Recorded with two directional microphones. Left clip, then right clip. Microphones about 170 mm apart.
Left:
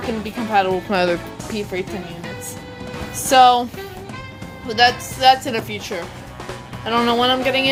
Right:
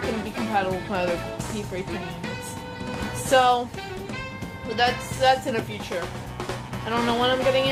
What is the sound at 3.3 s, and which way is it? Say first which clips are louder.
Speech: left 7 dB; 50° left (ahead or behind).